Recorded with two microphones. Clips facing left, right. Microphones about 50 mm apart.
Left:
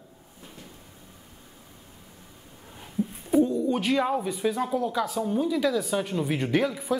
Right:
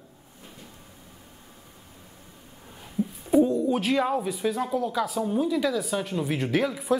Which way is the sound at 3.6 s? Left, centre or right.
Centre.